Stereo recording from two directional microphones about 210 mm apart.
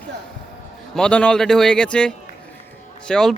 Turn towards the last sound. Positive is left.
turn(degrees=0)  # may be behind; listen again after turning